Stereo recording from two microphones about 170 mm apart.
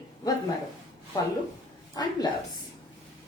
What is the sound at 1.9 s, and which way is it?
Speech, 25° left (ahead or behind).